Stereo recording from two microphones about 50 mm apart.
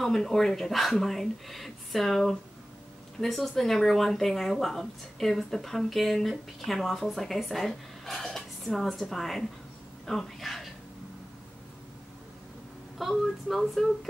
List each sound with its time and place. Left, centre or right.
0.0 s speech: centre
12.9 s speech: centre